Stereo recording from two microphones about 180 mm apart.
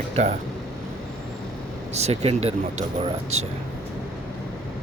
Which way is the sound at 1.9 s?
35° right (ahead or behind).